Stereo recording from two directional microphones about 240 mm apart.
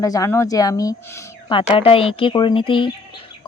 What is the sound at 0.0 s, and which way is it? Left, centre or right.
Speech, centre.